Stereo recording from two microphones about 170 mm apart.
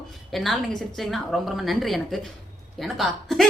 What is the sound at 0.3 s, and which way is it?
A woman's voice, centre (ahead or behind).